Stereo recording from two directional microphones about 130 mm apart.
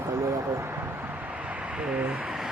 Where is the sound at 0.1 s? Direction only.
20° right (ahead or behind).